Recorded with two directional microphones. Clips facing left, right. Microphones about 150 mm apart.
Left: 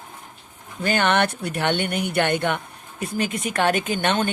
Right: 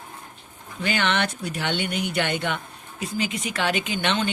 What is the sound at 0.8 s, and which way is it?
Speech, 45° left (ahead or behind).